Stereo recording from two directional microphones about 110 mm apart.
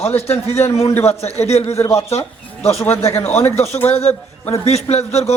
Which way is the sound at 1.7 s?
25° left (ahead or behind).